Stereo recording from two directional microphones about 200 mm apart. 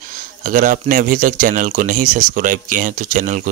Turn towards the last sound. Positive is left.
turn(degrees=-40)  # may be behind; listen again after turning